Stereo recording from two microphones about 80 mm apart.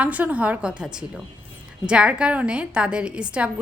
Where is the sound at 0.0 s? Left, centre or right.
Centre.